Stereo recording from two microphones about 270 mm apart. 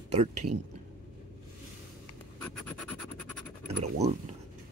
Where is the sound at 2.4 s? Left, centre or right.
Centre.